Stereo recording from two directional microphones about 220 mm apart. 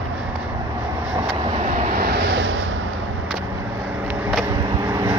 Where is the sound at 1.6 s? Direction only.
45° right (ahead or behind).